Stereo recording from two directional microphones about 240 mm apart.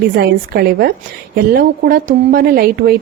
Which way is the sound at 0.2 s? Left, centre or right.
Right.